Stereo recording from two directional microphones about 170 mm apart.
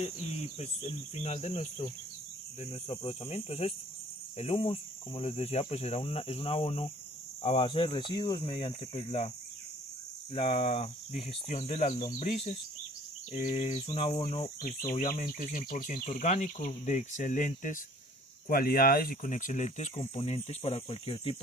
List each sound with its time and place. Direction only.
0.6 s speech: 40° left (ahead or behind)
10.3 s speech: 35° left (ahead or behind)
18.4 s speech: 60° left (ahead or behind); by 21.3 s 35° left (ahead or behind)